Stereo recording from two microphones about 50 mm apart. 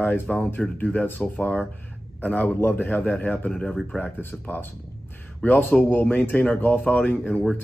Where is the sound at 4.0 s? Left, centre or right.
Left.